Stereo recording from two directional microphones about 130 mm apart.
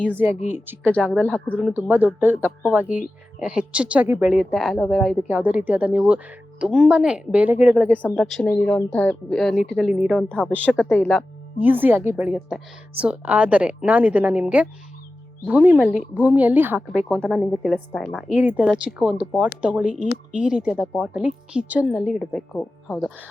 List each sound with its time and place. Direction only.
0.1 s a woman's voice: 15° right (ahead or behind)
0.3 s speech: 65° left (ahead or behind)
0.9 s speech: 10° left (ahead or behind)
1.3 s a woman's voice: 10° right (ahead or behind)
5.3 s a woman's voice: 10° right (ahead or behind)
8.1 s a woman's voice: centre (ahead or behind)
10.2 s speech: 10° left (ahead or behind)
11.6 s a woman's voice: 15° right (ahead or behind)
12.3 s a woman's voice: centre (ahead or behind)
13.0 s a woman's voice: 10° right (ahead or behind)
16.9 s a woman's voice: 5° left (ahead or behind)
18.3 s a woman's voice: 10° right (ahead or behind)
22.2 s speech: 5° left (ahead or behind)